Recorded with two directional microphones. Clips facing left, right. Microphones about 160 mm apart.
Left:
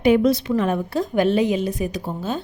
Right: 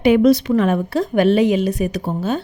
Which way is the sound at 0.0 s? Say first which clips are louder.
Right 4 dB; 85° right.